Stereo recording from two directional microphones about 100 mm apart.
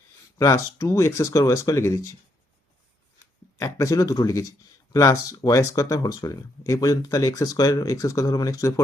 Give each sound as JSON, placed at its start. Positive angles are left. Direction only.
{"t": 0.3, "sound": "speech", "side_deg": 30}
{"t": 3.6, "sound": "speech", "side_deg": 30}